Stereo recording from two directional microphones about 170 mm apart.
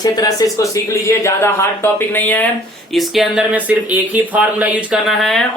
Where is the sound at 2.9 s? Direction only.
Centre (ahead or behind).